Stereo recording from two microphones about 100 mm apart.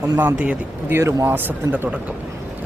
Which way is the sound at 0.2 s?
15° right (ahead or behind).